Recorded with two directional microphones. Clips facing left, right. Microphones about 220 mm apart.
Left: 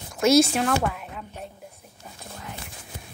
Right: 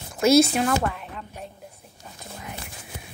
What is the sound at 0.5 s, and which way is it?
Speech, centre (ahead or behind).